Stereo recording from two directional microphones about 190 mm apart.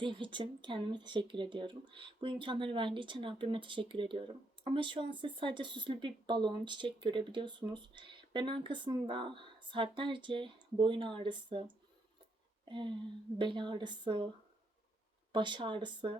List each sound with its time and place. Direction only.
0.0 s speech: 25° right (ahead or behind)
12.6 s speech: 25° right (ahead or behind)
15.3 s speech: 25° right (ahead or behind)